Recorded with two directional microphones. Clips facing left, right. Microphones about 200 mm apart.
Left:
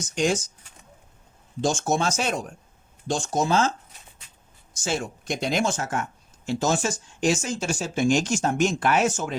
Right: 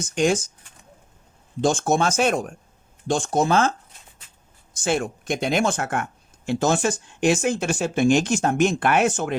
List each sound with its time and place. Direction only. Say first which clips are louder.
0.2 s speech: right 3 dB; 55° right (ahead or behind)
1.6 s speech: right 3 dB; 55° right (ahead or behind)